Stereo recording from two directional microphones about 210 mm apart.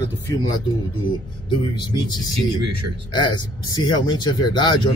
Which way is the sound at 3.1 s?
20° left (ahead or behind).